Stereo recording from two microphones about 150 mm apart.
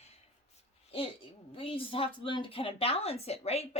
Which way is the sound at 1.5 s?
35° left (ahead or behind).